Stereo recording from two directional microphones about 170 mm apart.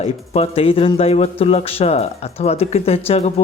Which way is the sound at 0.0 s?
35° left (ahead or behind).